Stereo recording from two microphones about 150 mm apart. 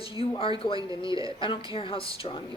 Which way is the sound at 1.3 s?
35° left (ahead or behind).